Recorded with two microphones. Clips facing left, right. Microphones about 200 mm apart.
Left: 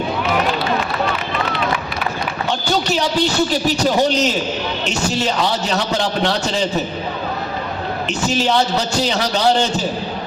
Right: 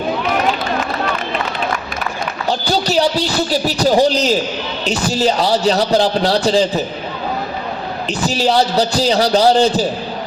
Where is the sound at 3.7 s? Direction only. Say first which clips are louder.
Right 6 dB; 35° right (ahead or behind).